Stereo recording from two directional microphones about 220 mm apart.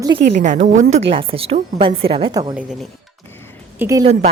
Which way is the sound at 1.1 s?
25° right (ahead or behind).